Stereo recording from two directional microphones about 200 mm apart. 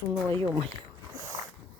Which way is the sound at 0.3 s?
20° right (ahead or behind).